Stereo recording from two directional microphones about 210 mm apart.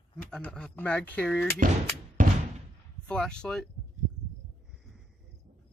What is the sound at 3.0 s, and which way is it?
Speech, 5° left (ahead or behind).